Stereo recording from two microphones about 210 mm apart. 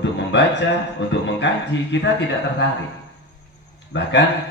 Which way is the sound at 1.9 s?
55° left (ahead or behind).